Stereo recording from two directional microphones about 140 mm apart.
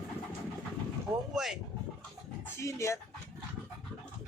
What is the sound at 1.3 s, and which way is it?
Speech, 5° right (ahead or behind).